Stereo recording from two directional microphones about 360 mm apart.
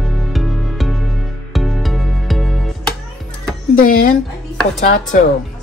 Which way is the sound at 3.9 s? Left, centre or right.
Left.